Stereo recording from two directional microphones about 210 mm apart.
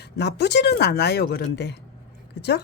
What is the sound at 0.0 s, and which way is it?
Speech, 50° left (ahead or behind).